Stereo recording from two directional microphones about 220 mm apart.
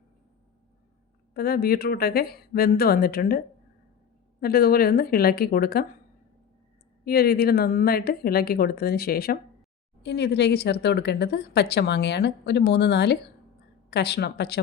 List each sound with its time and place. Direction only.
1.3 s speech: 45° left (ahead or behind)
7.0 s speech: 45° left (ahead or behind)